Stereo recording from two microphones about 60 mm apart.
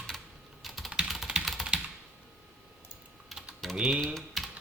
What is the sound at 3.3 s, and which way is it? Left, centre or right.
Typing, centre.